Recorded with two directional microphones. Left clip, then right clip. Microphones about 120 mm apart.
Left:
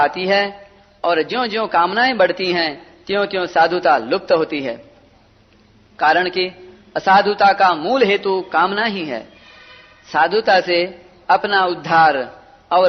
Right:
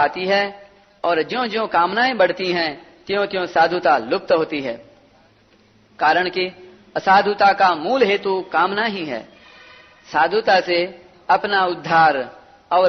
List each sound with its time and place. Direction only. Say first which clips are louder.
0.0 s a man's voice: left 2 dB; 45° left (ahead or behind)
6.0 s a man's voice: left 2 dB; 45° left (ahead or behind)